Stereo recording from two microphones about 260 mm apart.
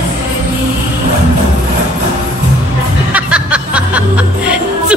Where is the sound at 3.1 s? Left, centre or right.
Centre.